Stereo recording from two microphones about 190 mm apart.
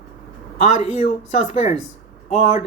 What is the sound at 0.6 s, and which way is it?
Speech, 35° left (ahead or behind).